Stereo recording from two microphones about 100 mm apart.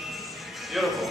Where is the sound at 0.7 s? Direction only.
Centre (ahead or behind).